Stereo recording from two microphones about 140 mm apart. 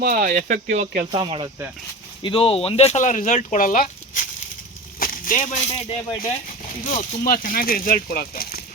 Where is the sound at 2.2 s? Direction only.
40° left (ahead or behind); by 4.2 s 80° left.